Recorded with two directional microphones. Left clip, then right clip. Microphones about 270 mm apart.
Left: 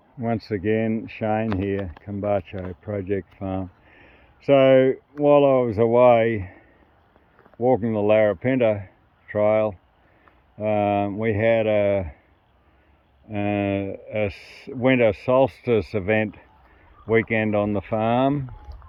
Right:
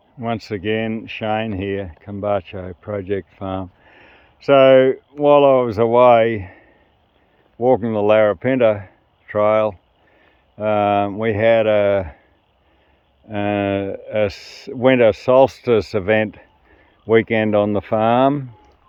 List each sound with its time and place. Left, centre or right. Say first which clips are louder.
0.2 s speech: right 2 dB; centre
13.3 s speech: right 5 dB; centre